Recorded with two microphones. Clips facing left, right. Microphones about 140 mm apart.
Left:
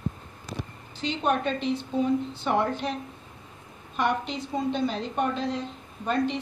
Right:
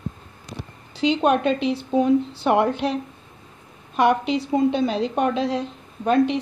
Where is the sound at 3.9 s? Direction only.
85° right.